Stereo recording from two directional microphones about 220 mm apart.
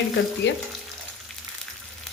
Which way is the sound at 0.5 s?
55° left (ahead or behind).